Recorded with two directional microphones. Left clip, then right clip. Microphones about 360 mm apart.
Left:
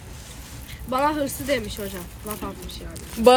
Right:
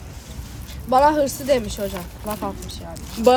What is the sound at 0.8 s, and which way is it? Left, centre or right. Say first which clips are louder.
Speech: right 7 dB; centre.